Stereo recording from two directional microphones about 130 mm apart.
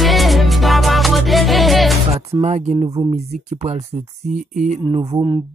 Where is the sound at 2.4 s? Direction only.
65° right (ahead or behind).